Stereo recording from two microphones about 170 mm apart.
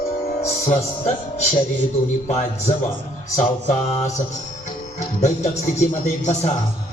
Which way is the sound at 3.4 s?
35° left (ahead or behind).